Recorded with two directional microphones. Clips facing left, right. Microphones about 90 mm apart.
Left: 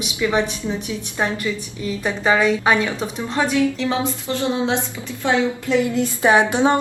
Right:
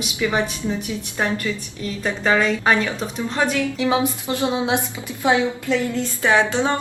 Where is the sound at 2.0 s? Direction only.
10° left (ahead or behind).